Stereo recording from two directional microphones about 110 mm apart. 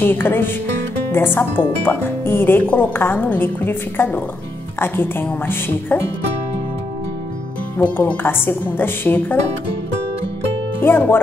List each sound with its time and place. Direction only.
0.0 s speech: 20° left (ahead or behind)
7.7 s speech: 15° left (ahead or behind)
10.8 s speech: 20° left (ahead or behind)